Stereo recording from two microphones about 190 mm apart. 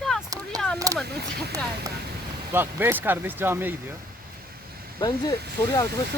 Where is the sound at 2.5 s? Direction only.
10° right (ahead or behind).